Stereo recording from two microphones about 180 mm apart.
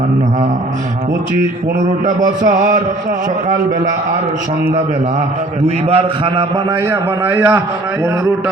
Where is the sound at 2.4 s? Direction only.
45° right (ahead or behind).